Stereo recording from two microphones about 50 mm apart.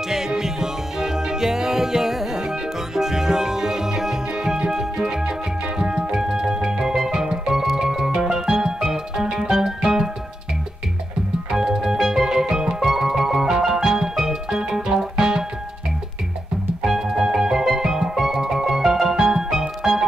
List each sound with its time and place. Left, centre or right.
0.1 s music: centre
11.5 s music: centre
16.8 s music: centre